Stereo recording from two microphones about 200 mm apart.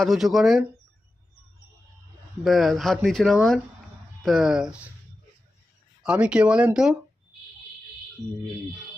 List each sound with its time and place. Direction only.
0.0 s speech: centre (ahead or behind)
2.4 s speech: centre (ahead or behind)
6.0 s speech: 5° right (ahead or behind)